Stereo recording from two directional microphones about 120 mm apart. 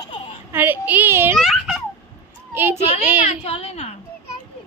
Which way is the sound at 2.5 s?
20° right (ahead or behind).